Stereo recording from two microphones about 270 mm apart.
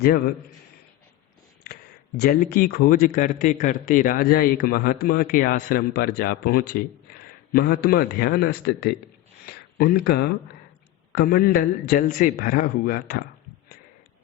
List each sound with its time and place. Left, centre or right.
1.6 s speech: left